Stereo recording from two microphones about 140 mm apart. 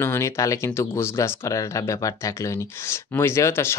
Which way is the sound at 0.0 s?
20° left (ahead or behind).